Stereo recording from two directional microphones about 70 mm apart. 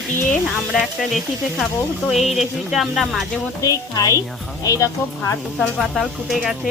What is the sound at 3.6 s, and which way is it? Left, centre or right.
A woman's voice, left.